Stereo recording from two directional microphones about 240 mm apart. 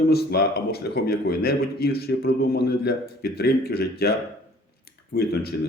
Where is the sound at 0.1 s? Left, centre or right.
Left.